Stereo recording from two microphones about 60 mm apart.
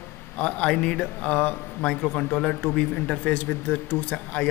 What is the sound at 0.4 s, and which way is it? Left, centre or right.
A man's voice, centre.